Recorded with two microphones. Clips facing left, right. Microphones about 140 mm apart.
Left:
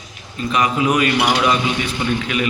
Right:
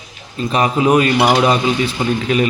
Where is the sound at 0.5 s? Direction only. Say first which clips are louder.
Right 4 dB; 35° right (ahead or behind).